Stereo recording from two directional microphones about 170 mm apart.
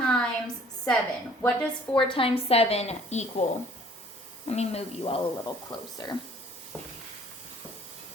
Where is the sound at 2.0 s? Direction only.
30° left (ahead or behind).